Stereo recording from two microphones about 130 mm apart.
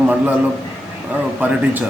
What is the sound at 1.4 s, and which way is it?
Speech, 10° right (ahead or behind).